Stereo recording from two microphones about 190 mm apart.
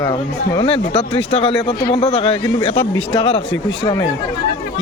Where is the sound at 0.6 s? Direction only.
30° left (ahead or behind).